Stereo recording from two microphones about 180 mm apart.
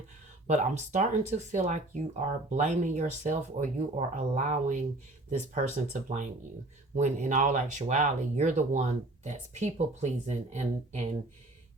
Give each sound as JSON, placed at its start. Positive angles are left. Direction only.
{"t": 0.4, "sound": "speech", "side_deg": -40}